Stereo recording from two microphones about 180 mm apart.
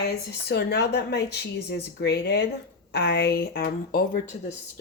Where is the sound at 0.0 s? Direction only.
65° left (ahead or behind).